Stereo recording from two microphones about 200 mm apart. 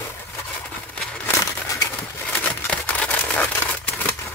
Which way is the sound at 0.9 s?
5° left (ahead or behind).